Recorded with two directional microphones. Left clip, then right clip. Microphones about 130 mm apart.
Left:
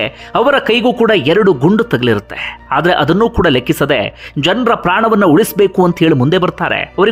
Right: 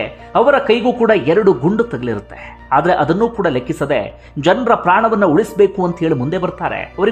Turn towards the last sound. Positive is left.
turn(degrees=35)  # may be behind; listen again after turning